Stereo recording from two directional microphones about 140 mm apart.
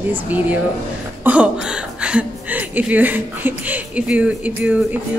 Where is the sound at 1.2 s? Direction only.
10° right (ahead or behind).